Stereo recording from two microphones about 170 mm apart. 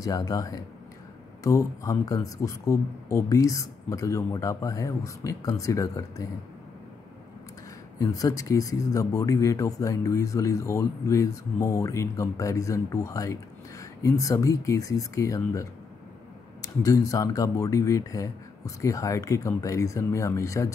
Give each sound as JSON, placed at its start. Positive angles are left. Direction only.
{"t": 0.0, "sound": "a man's voice", "side_deg": 20}
{"t": 8.0, "sound": "a man's voice", "side_deg": 20}